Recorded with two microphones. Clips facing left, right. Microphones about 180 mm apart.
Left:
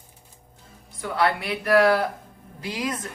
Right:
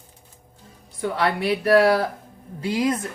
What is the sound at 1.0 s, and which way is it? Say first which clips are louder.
A woman's voice: right 1 dB; 30° right (ahead or behind).